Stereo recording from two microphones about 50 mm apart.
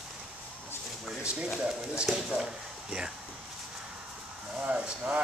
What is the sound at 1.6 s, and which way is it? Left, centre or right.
Speech, centre.